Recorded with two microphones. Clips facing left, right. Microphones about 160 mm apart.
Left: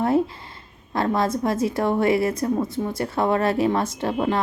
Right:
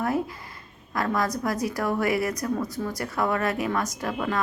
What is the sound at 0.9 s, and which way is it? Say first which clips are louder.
A woman's voice: left 4 dB; 25° left (ahead or behind).